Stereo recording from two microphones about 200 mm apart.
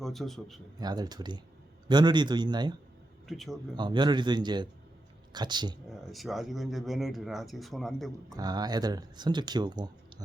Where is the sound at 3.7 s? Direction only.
20° right (ahead or behind).